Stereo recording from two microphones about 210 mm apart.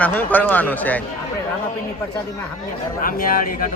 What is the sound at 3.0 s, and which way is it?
Speech, 40° left (ahead or behind).